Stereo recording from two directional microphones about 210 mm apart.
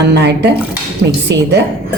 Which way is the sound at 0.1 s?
55° right (ahead or behind).